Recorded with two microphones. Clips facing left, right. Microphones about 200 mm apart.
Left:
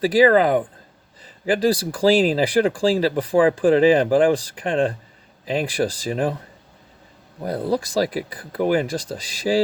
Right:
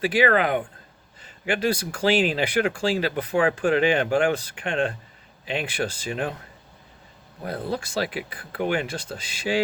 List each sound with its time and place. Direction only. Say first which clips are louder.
0.0 s speech: left 6 dB; 35° left (ahead or behind)
7.4 s speech: left 6 dB; 40° left (ahead or behind)